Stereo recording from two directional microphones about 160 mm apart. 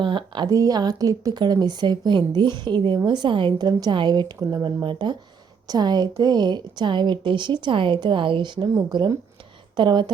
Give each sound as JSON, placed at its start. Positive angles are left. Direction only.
{"t": 0.0, "sound": "a woman's voice", "side_deg": -30}